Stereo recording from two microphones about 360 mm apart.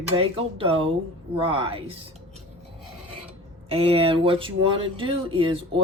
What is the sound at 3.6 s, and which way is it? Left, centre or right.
Speech, centre.